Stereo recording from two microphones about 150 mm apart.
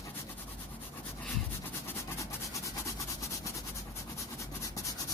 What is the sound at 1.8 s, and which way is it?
Vehicle, 20° left (ahead or behind).